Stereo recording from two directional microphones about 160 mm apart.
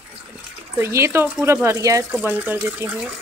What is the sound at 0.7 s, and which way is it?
Speech, 15° right (ahead or behind).